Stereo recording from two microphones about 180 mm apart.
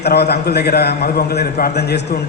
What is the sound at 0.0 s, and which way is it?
A man's voice, 65° left (ahead or behind).